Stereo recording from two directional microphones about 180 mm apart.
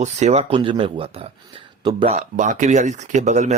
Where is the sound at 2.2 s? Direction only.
45° right (ahead or behind).